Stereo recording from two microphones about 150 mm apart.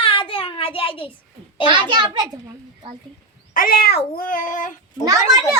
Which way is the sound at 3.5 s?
70° left (ahead or behind).